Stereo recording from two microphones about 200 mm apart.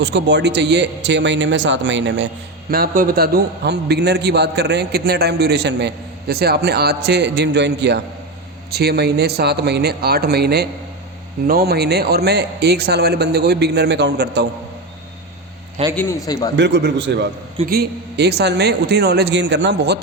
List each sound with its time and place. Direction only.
0.0 s a man's voice: 60° right (ahead or behind)
2.6 s a man's voice: 45° right (ahead or behind)
16.0 s a man's voice: 15° left (ahead or behind)
16.6 s a man's voice: 60° right (ahead or behind)